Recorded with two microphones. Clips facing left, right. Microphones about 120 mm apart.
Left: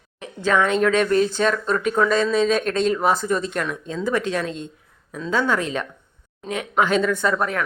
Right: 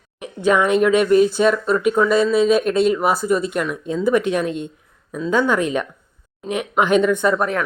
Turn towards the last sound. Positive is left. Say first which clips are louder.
# right 4 dB
turn(degrees=-20)  # may be behind; listen again after turning